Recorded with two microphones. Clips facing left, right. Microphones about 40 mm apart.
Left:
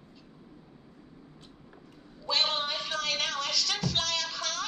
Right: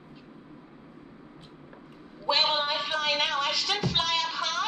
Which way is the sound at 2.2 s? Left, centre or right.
Right.